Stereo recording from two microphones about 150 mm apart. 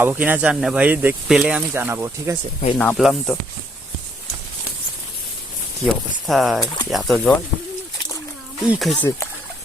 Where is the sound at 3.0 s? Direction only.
Centre (ahead or behind).